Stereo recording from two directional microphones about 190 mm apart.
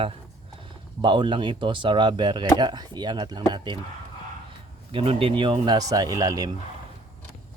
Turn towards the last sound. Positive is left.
turn(degrees=-20)  # may be behind; listen again after turning